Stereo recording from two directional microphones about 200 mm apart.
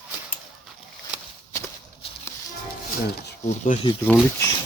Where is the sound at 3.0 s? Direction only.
50° left (ahead or behind).